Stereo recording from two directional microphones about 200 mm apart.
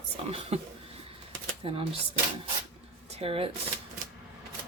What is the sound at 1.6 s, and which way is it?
Speech, 25° right (ahead or behind).